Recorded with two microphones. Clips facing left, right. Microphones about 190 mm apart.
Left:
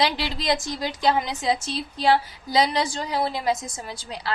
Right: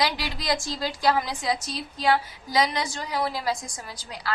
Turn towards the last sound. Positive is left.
turn(degrees=25)  # may be behind; listen again after turning